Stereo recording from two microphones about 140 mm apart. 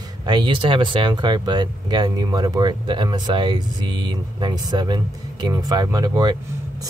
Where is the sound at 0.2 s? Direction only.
35° right (ahead or behind).